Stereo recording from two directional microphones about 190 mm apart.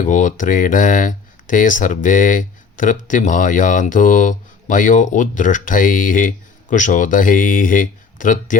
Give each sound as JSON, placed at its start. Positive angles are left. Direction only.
{"t": 0.0, "sound": "speech", "side_deg": 40}